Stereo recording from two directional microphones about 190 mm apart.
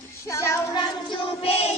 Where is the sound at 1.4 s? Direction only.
30° left (ahead or behind).